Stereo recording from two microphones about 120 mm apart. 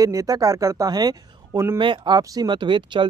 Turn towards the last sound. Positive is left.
turn(degrees=-40)  # may be behind; listen again after turning